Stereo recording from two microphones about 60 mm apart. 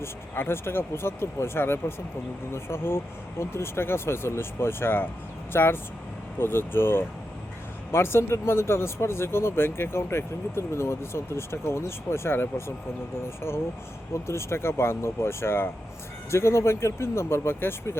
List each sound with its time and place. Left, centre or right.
0.0 s speech: left
14.1 s speech: left